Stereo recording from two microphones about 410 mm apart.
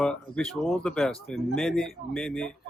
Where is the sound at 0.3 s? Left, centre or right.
Centre.